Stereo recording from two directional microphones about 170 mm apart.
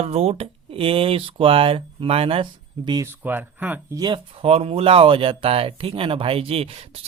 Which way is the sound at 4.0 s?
30° right (ahead or behind).